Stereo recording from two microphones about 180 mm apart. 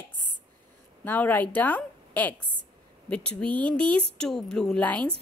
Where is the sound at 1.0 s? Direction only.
10° left (ahead or behind).